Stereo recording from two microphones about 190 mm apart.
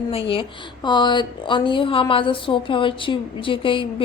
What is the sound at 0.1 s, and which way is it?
A woman's voice, 30° left (ahead or behind).